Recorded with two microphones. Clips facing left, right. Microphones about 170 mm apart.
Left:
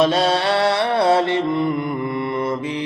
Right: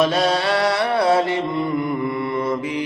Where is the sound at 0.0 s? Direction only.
30° left (ahead or behind).